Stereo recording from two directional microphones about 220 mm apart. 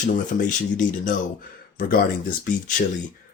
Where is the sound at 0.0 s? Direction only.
35° left (ahead or behind).